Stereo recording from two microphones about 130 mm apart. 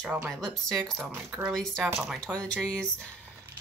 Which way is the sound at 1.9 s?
5° right (ahead or behind).